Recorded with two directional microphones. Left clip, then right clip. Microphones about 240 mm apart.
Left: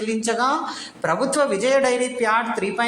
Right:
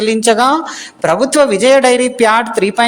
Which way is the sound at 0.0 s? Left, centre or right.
Right.